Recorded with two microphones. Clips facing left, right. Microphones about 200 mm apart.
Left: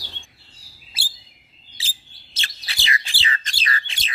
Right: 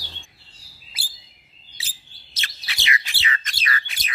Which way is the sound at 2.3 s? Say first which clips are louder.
Even; 30° left (ahead or behind).